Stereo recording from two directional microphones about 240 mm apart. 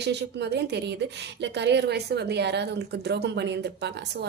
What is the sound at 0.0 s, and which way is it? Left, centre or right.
A woman's voice, right.